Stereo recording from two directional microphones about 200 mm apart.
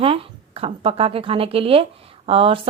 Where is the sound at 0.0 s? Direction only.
25° right (ahead or behind).